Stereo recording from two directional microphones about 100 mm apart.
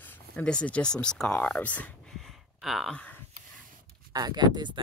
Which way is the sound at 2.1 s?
Centre (ahead or behind).